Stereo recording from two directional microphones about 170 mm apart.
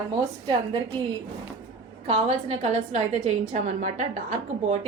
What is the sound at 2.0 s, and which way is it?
A woman's voice, 40° right (ahead or behind).